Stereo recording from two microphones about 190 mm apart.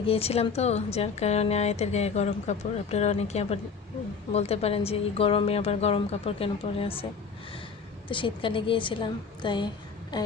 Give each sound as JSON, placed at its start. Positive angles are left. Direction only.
{"t": 0.0, "sound": "a woman's voice", "side_deg": 30}